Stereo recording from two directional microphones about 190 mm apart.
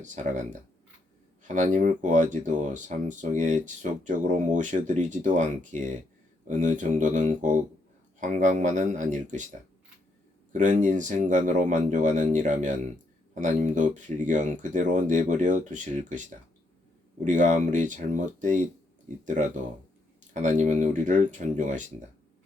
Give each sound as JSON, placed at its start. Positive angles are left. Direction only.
{"t": 0.0, "sound": "speech", "side_deg": -40}
{"t": 1.5, "sound": "speech", "side_deg": -40}
{"t": 10.5, "sound": "speech", "side_deg": -40}
{"t": 17.2, "sound": "speech", "side_deg": -40}